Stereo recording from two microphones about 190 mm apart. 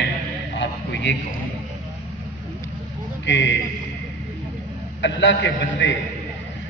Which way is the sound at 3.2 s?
70° left (ahead or behind).